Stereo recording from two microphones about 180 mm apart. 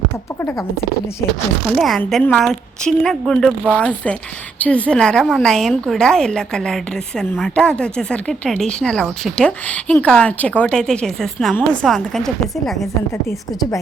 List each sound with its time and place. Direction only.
1.6 s a woman's voice: centre (ahead or behind)
13.2 s a woman's voice: 15° left (ahead or behind)